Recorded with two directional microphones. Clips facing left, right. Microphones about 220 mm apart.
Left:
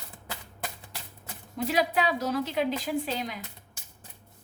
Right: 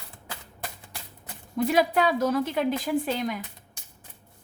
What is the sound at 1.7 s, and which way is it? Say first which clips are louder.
Speech: right 3 dB; 50° right (ahead or behind).